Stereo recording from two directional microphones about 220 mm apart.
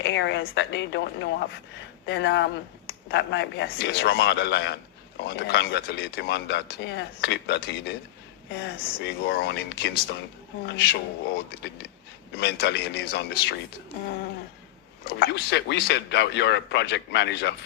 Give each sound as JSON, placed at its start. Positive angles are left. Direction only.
{"t": 0.0, "sound": "speech", "side_deg": 55}
{"t": 15.2, "sound": "speech", "side_deg": 50}